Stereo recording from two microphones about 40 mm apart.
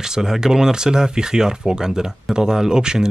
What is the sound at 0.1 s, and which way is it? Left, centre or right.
Speech, centre.